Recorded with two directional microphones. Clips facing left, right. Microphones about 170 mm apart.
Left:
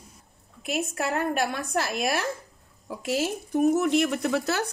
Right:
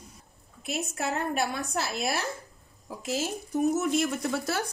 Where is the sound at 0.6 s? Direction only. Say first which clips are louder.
Left 3 dB; 60° left (ahead or behind).